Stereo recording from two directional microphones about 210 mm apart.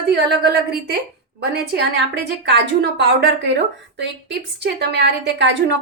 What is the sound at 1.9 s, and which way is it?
A woman's voice, 55° right (ahead or behind).